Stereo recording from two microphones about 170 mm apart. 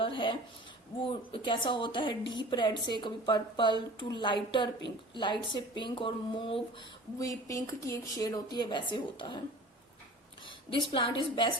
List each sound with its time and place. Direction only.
0.0 s a sound: 30° left (ahead or behind)
1.0 s a woman's voice: 30° left (ahead or behind)
7.2 s a woman's voice: 20° left (ahead or behind)
10.7 s a woman's voice: 30° left (ahead or behind)